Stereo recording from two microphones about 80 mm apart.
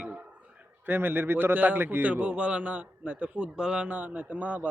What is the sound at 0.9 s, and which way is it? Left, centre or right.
Speech, right.